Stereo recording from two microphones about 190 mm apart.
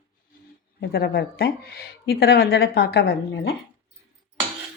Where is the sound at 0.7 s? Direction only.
55° left (ahead or behind).